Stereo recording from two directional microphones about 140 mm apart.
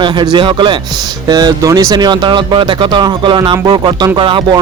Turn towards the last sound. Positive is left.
turn(degrees=-35)  # may be behind; listen again after turning